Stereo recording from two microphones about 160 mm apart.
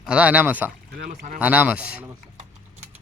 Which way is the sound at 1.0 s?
50° right (ahead or behind).